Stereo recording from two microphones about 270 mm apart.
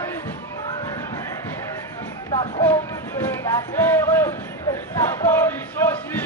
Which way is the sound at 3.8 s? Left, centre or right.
Centre.